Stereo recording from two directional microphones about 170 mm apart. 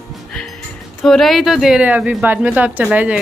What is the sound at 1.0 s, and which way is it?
Speech, centre (ahead or behind).